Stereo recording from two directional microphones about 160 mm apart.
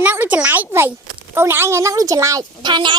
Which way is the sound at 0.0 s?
10° right (ahead or behind).